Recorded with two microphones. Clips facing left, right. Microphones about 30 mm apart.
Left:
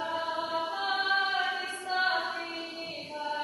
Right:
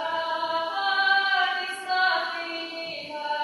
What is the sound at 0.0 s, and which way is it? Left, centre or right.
Chant, right.